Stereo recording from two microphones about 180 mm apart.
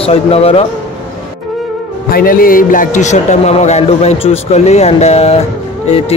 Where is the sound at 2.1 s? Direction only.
55° left (ahead or behind).